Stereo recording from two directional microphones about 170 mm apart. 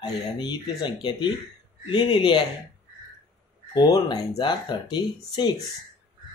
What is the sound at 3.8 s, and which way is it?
Speech, 20° left (ahead or behind).